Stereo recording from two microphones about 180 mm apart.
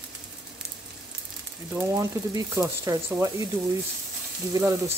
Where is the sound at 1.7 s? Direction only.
15° right (ahead or behind).